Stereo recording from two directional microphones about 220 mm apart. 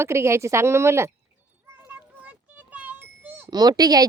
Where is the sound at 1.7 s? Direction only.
10° right (ahead or behind).